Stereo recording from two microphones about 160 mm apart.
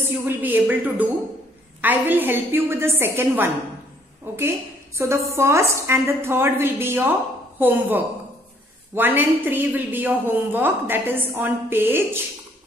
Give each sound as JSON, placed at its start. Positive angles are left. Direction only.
{"t": 0.0, "sound": "a woman's voice", "side_deg": -10}